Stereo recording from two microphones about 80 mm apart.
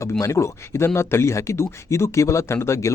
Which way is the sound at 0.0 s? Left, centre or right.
Left.